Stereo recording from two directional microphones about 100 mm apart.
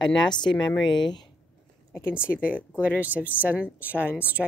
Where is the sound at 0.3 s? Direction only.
50° left (ahead or behind).